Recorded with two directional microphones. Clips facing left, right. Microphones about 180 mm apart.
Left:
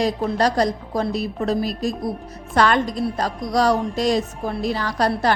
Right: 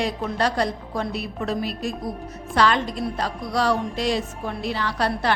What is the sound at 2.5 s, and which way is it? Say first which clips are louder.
A woman's voice: left 3 dB; 50° left (ahead or behind).